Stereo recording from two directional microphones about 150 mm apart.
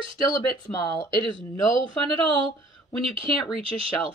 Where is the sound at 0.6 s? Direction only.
25° left (ahead or behind).